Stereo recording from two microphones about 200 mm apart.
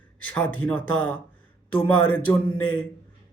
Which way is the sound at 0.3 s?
5° left (ahead or behind).